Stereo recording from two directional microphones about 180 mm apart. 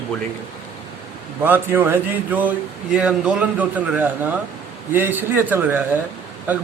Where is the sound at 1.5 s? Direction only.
10° right (ahead or behind).